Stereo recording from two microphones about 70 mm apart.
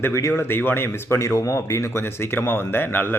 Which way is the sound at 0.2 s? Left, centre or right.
Left.